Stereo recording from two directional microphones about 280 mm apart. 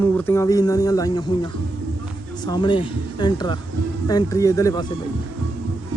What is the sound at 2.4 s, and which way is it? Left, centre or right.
Speech, centre.